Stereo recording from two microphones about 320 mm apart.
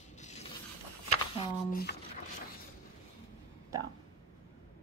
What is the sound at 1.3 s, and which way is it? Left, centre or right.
Speech, left.